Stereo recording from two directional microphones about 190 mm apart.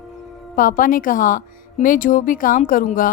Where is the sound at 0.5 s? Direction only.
45° left (ahead or behind).